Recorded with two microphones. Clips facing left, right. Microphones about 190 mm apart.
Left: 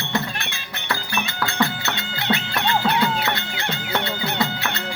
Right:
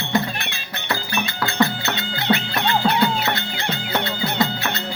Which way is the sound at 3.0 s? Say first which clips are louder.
Right 2 dB; 25° right (ahead or behind).